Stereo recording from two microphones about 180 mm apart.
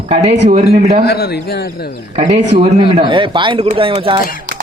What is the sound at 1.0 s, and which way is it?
Speech, 60° left (ahead or behind).